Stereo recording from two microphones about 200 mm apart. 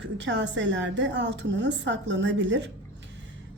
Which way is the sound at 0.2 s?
65° right (ahead or behind).